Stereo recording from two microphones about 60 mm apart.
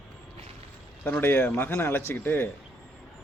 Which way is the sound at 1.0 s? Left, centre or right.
Left.